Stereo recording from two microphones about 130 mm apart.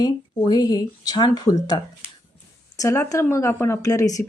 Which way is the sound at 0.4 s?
30° left (ahead or behind).